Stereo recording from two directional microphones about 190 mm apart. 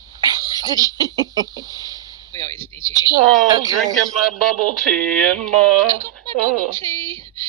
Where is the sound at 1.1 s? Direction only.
20° right (ahead or behind).